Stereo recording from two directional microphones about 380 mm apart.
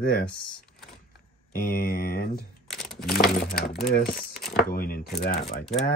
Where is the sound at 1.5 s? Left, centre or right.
Left.